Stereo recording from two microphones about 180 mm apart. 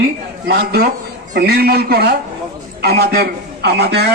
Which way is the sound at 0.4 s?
60° right (ahead or behind).